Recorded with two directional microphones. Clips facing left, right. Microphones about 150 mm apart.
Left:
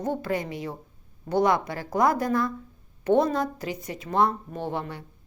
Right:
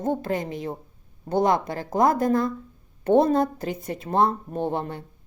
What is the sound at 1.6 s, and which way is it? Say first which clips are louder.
A woman's voice: right 2 dB; 45° right (ahead or behind).